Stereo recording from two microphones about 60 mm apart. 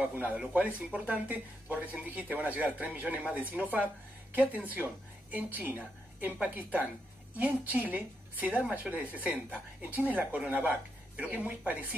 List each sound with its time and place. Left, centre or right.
0.0 s speech: right
5.3 s a woman's voice: right